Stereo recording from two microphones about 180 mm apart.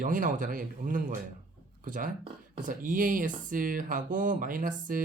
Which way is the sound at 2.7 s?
50° right (ahead or behind).